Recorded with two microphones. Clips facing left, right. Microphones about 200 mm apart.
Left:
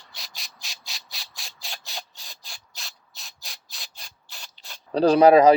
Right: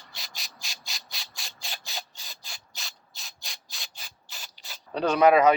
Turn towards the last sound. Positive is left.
turn(degrees=35)  # may be behind; listen again after turning